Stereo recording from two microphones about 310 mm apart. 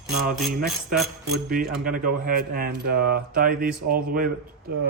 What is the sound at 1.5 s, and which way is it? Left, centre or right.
Speech, right.